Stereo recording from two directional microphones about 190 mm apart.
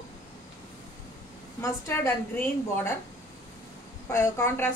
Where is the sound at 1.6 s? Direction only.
10° left (ahead or behind).